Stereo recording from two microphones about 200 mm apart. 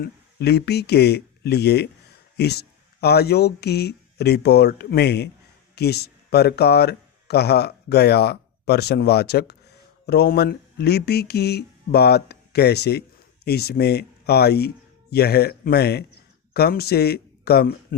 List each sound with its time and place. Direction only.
0.0 s speech: 55° left (ahead or behind)